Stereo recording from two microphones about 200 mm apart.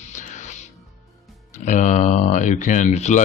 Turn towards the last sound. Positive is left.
turn(degrees=35)  # may be behind; listen again after turning